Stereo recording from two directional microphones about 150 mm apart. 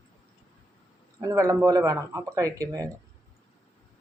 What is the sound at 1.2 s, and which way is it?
Speech, 20° right (ahead or behind).